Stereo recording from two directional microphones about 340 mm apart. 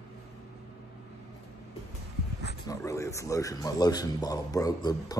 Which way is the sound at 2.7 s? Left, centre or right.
Centre.